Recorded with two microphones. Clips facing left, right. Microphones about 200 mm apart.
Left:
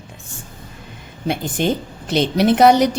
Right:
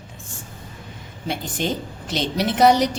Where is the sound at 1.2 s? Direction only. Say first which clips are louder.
Left 5 dB; 55° left (ahead or behind).